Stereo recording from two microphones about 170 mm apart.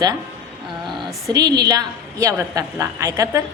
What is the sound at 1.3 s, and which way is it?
A woman's voice, 20° right (ahead or behind).